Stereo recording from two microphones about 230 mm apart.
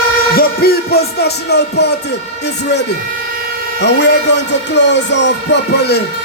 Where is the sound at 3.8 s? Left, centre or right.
Left.